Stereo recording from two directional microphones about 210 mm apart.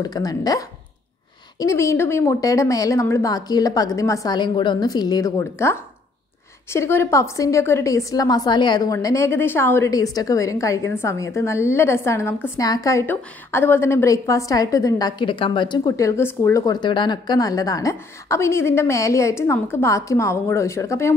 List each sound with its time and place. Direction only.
0.0 s a woman's voice: 15° left (ahead or behind)